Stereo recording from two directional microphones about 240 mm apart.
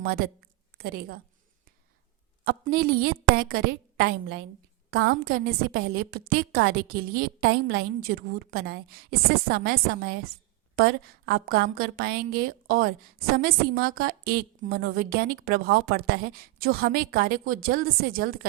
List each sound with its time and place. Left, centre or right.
0.8 s a woman's voice: right
2.4 s a woman's voice: right